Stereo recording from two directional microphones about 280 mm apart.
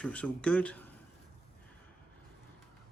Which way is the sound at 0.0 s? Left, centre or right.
Centre.